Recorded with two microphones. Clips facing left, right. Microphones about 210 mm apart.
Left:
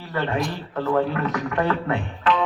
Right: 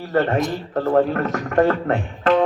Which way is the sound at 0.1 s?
45° right (ahead or behind).